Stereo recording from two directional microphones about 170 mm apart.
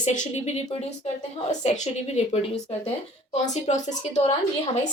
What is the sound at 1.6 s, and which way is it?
A woman's voice, 40° left (ahead or behind).